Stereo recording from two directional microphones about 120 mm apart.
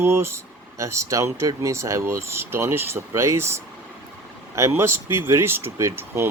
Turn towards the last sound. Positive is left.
turn(degrees=-20)  # may be behind; listen again after turning